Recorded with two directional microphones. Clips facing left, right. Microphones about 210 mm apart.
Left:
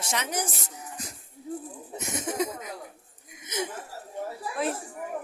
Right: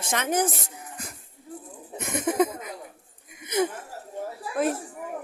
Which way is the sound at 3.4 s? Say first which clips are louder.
Right 8 dB; 55° right (ahead or behind).